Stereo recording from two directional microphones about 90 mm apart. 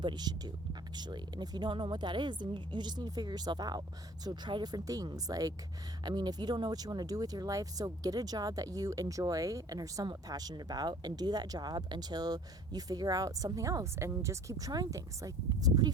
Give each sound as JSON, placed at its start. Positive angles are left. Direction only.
{"t": 0.0, "sound": "speech", "side_deg": -55}